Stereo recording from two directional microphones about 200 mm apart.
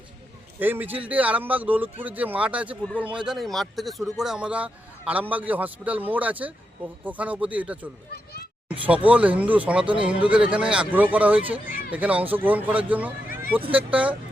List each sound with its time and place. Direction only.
0.6 s speech: 10° right (ahead or behind)
8.1 s a sound: 50° left (ahead or behind)
8.7 s a sound: 5° right (ahead or behind)
9.0 s speech: 5° right (ahead or behind)
9.8 s speech: 25° right (ahead or behind)
10.1 s speech: 5° right (ahead or behind)